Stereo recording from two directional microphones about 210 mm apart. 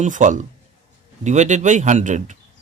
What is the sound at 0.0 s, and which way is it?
Speech, 35° right (ahead or behind).